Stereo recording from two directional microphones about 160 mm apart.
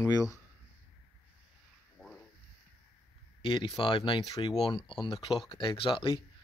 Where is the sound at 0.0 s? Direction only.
20° left (ahead or behind).